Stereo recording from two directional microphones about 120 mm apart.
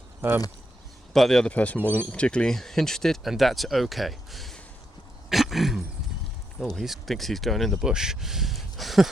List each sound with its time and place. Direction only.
0.2 s speech: 20° right (ahead or behind)
1.1 s speech: 5° left (ahead or behind)
5.3 s throat clearing: centre (ahead or behind)
6.6 s speech: centre (ahead or behind)